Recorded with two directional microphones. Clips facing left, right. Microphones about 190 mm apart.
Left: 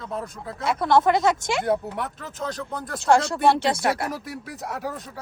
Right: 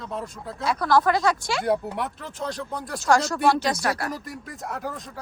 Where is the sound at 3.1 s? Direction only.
30° left (ahead or behind).